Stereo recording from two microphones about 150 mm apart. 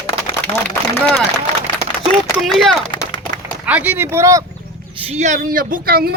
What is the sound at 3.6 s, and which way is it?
Speech, 10° right (ahead or behind).